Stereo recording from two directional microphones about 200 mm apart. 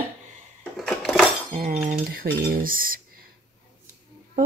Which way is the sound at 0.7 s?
Centre (ahead or behind).